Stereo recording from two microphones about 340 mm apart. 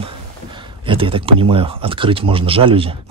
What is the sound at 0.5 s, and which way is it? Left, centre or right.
Speech, centre.